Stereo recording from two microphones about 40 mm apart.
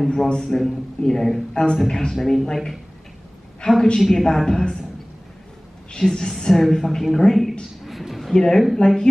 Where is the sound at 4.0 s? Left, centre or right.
Centre.